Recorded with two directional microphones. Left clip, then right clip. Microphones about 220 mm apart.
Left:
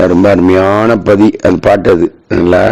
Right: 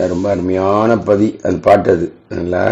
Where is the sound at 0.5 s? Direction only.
45° left (ahead or behind).